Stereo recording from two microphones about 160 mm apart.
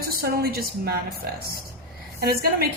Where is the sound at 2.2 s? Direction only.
70° right (ahead or behind).